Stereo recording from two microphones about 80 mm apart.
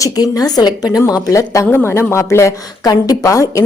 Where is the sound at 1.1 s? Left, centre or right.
Left.